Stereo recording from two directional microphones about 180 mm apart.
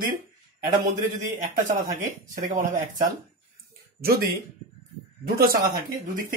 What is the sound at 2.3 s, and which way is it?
Speech, 45° right (ahead or behind).